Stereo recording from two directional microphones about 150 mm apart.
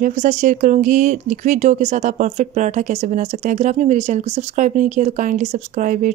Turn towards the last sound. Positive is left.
turn(degrees=-60)  # may be behind; listen again after turning